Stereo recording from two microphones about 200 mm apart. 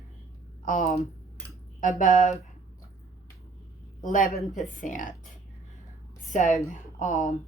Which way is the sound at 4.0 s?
40° left (ahead or behind).